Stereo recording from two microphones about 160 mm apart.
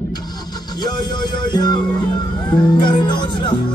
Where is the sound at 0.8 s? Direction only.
25° left (ahead or behind).